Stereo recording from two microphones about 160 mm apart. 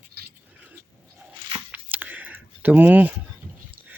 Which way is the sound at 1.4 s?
30° right (ahead or behind).